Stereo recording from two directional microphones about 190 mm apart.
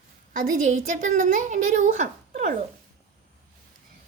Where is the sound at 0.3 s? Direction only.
40° right (ahead or behind).